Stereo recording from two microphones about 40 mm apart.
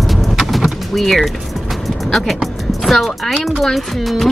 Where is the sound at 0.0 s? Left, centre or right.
Centre.